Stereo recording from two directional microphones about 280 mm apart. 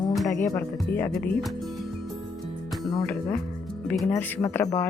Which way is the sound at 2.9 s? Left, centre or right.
Centre.